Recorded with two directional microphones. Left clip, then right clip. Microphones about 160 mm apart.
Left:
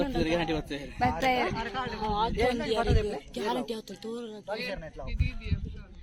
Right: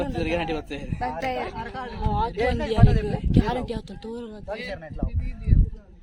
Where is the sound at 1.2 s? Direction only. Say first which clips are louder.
Left 1 dB; 50° left (ahead or behind).